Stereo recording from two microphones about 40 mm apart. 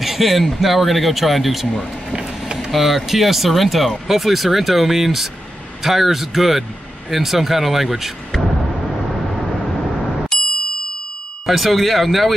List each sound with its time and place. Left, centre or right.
0.0 s a man's voice: centre
2.1 s vehicle: centre
2.7 s a man's voice: centre
10.3 s ding: centre
11.4 s a man's voice: centre